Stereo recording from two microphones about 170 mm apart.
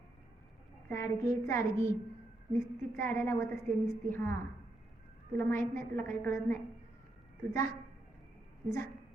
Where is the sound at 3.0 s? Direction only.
15° left (ahead or behind).